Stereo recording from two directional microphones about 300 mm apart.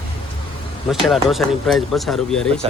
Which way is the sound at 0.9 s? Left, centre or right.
Centre.